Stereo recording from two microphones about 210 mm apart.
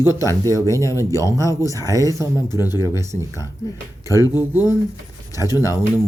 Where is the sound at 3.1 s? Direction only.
15° left (ahead or behind).